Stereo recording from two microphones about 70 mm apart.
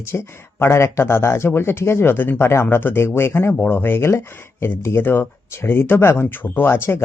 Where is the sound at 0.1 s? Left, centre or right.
Left.